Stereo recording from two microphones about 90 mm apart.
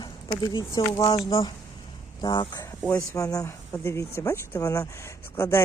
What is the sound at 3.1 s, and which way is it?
Speech, 40° left (ahead or behind).